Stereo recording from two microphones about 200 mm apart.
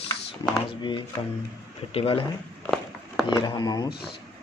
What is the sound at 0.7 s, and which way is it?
Speech, 25° left (ahead or behind).